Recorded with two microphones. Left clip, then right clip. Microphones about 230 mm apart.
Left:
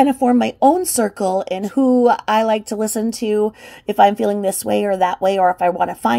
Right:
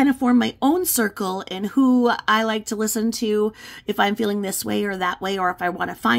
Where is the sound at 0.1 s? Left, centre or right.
Centre.